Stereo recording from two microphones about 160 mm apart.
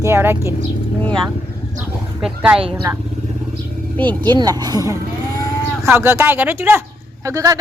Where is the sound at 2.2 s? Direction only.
10° right (ahead or behind).